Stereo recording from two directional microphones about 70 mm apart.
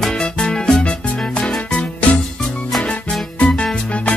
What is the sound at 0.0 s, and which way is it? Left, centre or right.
Music, centre.